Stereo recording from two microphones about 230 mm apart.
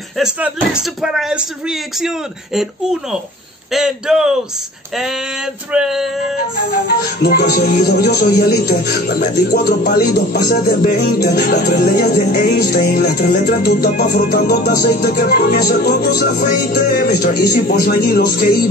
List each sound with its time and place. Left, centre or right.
0.2 s speech: centre
5.7 s speech: centre
7.2 s music: left